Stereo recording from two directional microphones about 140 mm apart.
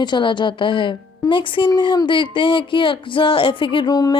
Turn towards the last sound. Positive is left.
turn(degrees=25)  # may be behind; listen again after turning